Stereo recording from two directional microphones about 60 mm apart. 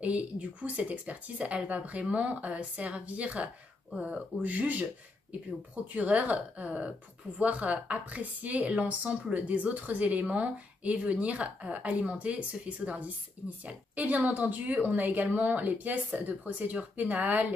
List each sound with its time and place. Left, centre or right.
0.0 s a woman's voice: right
5.9 s a woman's voice: right